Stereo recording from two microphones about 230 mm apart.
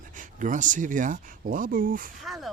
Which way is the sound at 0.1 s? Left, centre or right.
Right.